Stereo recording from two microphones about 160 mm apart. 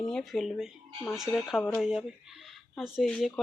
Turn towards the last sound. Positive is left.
turn(degrees=0)  # may be behind; listen again after turning